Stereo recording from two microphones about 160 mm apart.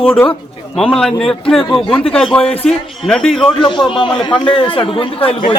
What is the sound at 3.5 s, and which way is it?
A man's voice, 30° left (ahead or behind).